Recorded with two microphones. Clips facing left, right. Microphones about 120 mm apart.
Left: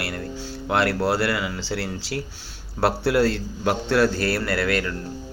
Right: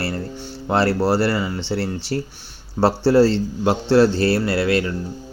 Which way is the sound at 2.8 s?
25° right (ahead or behind).